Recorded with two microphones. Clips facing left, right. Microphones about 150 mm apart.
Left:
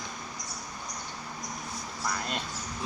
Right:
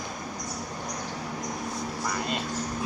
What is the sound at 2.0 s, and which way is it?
Mouse, centre (ahead or behind).